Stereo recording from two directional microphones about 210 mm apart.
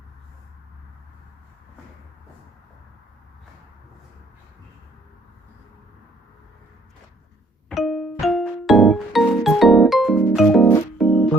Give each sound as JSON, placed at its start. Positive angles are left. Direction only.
{"t": 7.7, "sound": "music", "side_deg": 0}
{"t": 10.9, "sound": "organ", "side_deg": 5}